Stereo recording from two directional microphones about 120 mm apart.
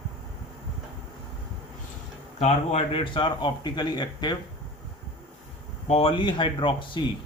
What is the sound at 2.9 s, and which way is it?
Speech, 40° left (ahead or behind).